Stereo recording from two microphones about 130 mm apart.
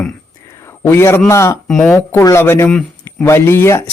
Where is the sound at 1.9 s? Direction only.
20° left (ahead or behind).